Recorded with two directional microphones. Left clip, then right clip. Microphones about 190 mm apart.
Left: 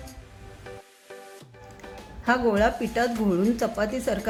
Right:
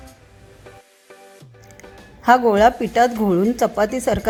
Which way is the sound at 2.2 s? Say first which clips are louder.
Right 9 dB; 40° right (ahead or behind).